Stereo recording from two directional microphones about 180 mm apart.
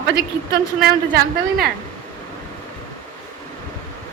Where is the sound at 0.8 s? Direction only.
60° right (ahead or behind).